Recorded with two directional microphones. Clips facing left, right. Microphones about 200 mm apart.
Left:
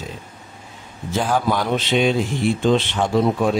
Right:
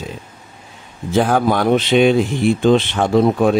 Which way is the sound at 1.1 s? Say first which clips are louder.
Right 5 dB; 55° right (ahead or behind).